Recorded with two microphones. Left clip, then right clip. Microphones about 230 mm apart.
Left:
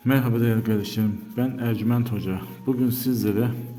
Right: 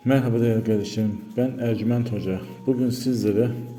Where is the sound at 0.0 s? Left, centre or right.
Centre.